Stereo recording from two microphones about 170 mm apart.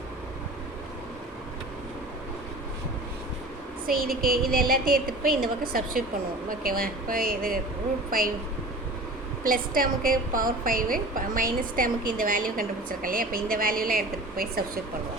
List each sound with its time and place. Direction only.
3.8 s a woman's voice: 60° right (ahead or behind)
9.4 s a woman's voice: 55° right (ahead or behind)